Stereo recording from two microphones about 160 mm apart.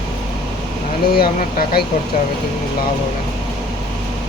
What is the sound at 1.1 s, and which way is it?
Speech, 65° left (ahead or behind).